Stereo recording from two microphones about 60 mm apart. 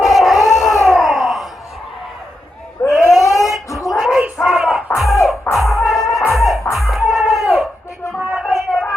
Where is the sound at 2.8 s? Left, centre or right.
Left.